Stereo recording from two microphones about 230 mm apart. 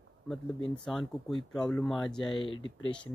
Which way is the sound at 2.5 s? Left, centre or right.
Left.